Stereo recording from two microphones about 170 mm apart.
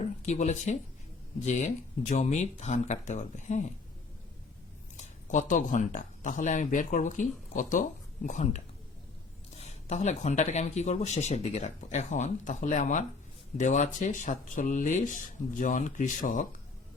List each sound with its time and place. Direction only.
0.2 s speech: 45° left (ahead or behind)
4.9 s speech: 45° left (ahead or behind)